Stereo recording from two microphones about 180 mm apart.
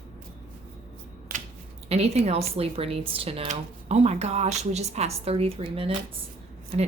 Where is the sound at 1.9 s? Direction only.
35° right (ahead or behind).